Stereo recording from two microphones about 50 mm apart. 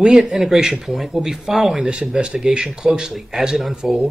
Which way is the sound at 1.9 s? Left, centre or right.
Centre.